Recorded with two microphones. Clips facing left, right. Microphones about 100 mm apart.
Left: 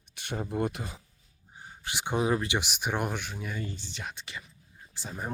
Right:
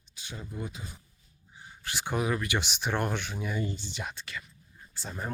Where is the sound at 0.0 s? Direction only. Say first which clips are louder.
Left 8 dB; 65° left (ahead or behind).